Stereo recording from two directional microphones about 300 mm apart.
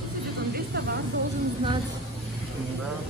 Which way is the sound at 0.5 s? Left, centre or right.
Right.